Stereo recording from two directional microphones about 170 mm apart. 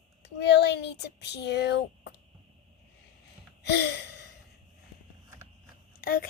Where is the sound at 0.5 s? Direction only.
85° left.